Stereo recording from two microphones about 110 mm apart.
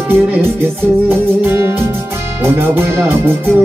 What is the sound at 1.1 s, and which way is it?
Music, 20° right (ahead or behind).